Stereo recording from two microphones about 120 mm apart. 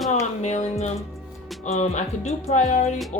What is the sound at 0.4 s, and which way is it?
Speech, 70° left (ahead or behind).